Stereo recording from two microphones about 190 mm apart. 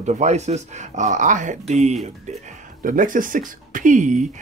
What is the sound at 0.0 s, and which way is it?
Speech, 35° right (ahead or behind).